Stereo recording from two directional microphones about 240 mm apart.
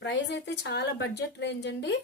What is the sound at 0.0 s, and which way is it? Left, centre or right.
A woman's voice, left.